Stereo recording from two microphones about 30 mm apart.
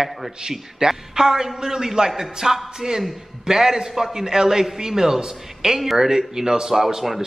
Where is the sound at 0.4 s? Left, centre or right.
Centre.